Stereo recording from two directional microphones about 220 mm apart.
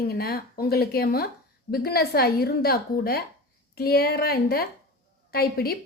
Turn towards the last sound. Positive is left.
turn(degrees=45)  # may be behind; listen again after turning